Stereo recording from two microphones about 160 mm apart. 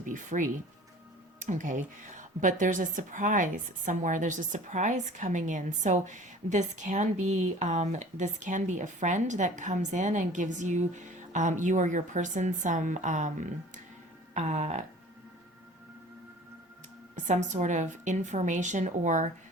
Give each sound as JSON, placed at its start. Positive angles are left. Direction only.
{"t": 0.0, "sound": "speech", "side_deg": -55}
{"t": 17.2, "sound": "speech", "side_deg": -50}